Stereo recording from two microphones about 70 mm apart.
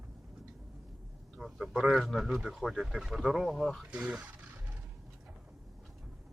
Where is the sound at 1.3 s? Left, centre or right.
Centre.